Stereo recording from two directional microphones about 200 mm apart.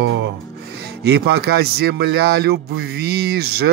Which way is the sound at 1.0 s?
55° right (ahead or behind).